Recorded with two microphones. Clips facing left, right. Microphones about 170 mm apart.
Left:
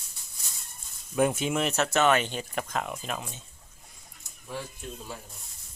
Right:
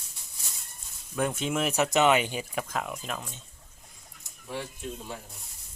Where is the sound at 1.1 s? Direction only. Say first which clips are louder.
Left 3 dB; 5° left (ahead or behind).